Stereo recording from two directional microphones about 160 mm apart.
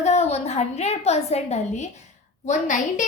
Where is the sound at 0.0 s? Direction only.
45° left (ahead or behind).